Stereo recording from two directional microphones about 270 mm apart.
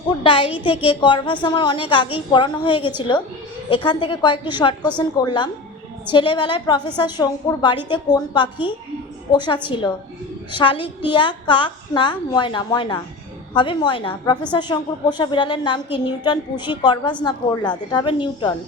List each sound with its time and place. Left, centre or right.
0.2 s a woman's voice: centre